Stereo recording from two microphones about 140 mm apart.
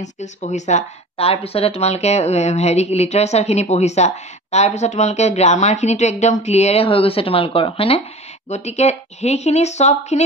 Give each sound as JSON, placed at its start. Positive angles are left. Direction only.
{"t": 0.0, "sound": "speech", "side_deg": 55}